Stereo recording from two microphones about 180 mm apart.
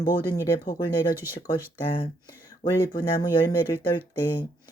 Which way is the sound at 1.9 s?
25° left (ahead or behind).